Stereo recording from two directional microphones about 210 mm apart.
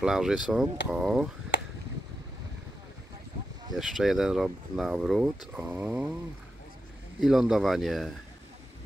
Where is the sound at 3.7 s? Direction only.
Centre (ahead or behind).